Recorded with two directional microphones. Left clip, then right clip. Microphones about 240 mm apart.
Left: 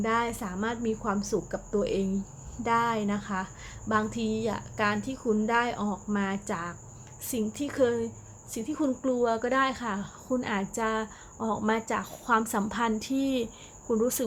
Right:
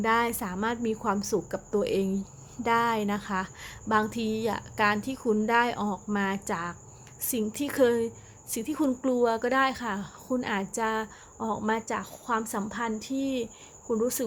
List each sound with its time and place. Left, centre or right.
0.0 s a woman's voice: centre